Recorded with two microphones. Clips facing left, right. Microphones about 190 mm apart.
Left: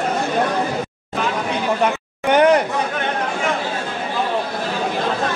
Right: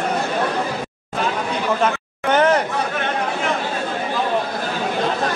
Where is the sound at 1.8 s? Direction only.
15° left (ahead or behind).